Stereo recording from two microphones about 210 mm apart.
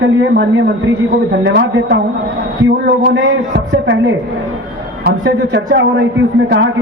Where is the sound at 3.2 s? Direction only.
60° right (ahead or behind).